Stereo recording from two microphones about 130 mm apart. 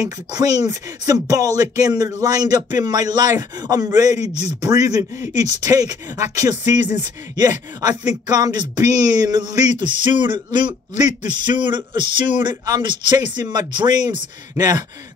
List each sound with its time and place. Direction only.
0.3 s speech: 30° right (ahead or behind)
4.3 s speech: 55° left (ahead or behind)
4.6 s speech: 30° right (ahead or behind)
8.3 s a sound: 30° right (ahead or behind)